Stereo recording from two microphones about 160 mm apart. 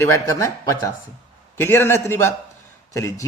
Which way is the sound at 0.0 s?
20° left (ahead or behind).